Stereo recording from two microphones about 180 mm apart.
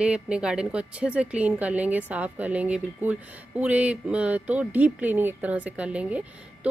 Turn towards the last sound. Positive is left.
turn(degrees=-5)  # may be behind; listen again after turning